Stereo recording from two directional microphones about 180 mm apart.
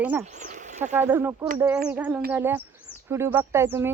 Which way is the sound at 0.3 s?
45° right (ahead or behind).